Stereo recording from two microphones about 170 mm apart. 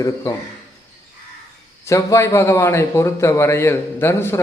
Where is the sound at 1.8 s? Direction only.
15° left (ahead or behind).